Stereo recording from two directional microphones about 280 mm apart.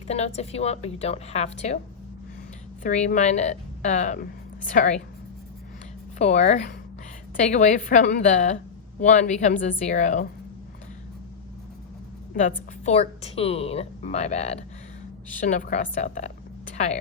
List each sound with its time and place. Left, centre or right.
0.1 s a woman's voice: left
2.8 s a woman's voice: left
6.1 s a woman's voice: left
12.8 s a woman's voice: left